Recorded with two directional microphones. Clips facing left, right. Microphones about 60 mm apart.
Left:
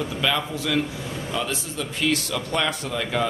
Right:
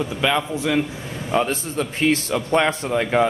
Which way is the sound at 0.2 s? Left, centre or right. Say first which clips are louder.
Right 4 dB; centre.